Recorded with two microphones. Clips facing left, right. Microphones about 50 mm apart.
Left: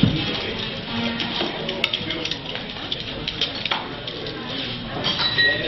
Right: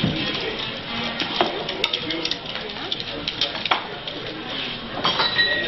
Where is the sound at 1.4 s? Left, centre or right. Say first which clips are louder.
Right 8 dB; right.